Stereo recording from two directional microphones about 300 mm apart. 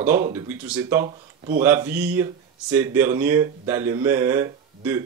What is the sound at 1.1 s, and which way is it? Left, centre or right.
Speech, right.